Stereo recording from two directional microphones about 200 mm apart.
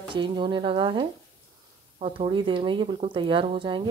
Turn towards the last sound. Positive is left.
turn(degrees=-25)  # may be behind; listen again after turning